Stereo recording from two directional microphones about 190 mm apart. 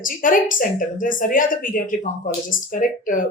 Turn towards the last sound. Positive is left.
turn(degrees=45)  # may be behind; listen again after turning